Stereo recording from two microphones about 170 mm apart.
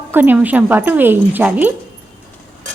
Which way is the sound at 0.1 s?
10° right (ahead or behind).